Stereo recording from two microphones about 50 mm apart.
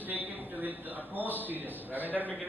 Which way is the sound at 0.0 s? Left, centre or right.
Right.